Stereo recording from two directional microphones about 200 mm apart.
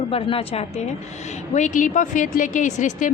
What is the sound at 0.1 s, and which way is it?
Speech, 30° left (ahead or behind).